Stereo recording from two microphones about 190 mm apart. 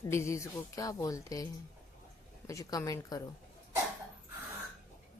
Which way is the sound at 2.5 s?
15° left (ahead or behind).